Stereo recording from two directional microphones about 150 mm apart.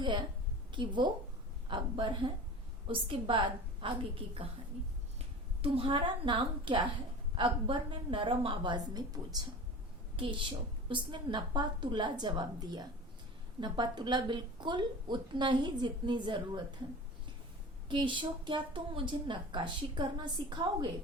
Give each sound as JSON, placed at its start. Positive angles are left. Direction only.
{"t": 0.0, "sound": "a woman's voice", "side_deg": -30}
{"t": 5.6, "sound": "a woman's voice", "side_deg": -35}
{"t": 17.8, "sound": "a woman's voice", "side_deg": -30}